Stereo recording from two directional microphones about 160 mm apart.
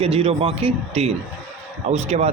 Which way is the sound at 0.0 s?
40° right (ahead or behind).